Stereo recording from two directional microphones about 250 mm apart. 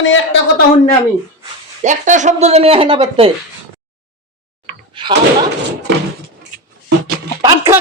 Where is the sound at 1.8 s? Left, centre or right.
Right.